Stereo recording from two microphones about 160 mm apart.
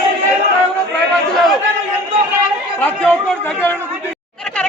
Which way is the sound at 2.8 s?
10° left (ahead or behind).